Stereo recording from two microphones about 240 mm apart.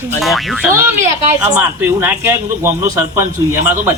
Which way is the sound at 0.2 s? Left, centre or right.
Centre.